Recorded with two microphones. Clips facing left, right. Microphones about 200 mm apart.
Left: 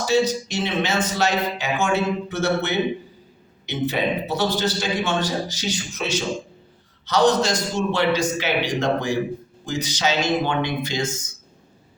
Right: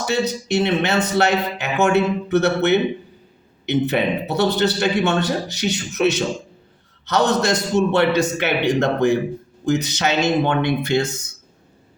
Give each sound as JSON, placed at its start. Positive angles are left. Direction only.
{"t": 0.0, "sound": "a man's voice", "side_deg": -60}
{"t": 3.7, "sound": "a man's voice", "side_deg": -60}